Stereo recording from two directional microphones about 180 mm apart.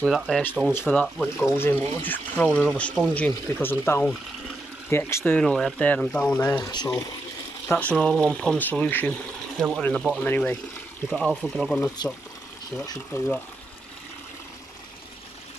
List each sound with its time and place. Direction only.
0.0 s speech: centre (ahead or behind)
1.4 s speech: 10° left (ahead or behind)
7.6 s speech: 10° left (ahead or behind)
12.8 s speech: 20° left (ahead or behind)